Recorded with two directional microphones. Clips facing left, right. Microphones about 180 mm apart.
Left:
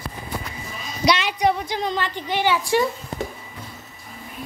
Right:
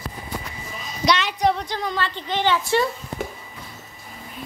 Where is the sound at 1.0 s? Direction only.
5° left (ahead or behind).